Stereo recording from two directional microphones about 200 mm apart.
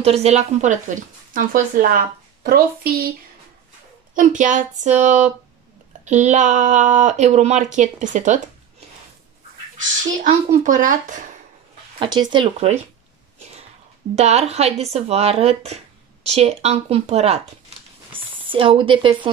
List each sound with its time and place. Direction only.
0.0 s speech: 30° right (ahead or behind); by 3.1 s 50° right (ahead or behind)
4.1 s speech: 40° right (ahead or behind)
10.2 s speech: 40° right (ahead or behind)
12.0 s speech: 20° right (ahead or behind)
13.4 s a sound: 30° right (ahead or behind)
14.1 s speech: 35° right (ahead or behind)
18.1 s a sound: 25° right (ahead or behind)